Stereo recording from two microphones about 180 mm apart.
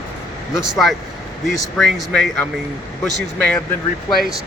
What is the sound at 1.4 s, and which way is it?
Speech, centre (ahead or behind).